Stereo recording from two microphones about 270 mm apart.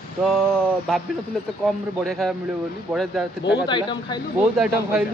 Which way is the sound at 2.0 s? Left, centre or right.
Centre.